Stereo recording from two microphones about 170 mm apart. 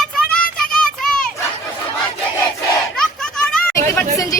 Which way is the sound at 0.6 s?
5° left (ahead or behind).